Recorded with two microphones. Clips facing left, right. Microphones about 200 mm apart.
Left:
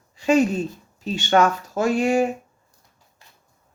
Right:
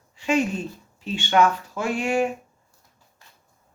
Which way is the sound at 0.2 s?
40° left (ahead or behind).